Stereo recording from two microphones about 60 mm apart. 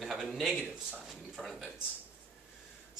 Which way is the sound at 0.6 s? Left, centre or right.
Centre.